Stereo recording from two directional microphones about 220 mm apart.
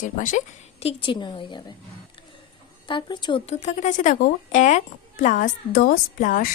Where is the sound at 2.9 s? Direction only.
20° left (ahead or behind).